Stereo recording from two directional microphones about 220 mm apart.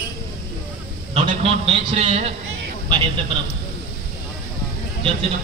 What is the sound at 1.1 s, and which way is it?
A man's voice, 30° right (ahead or behind).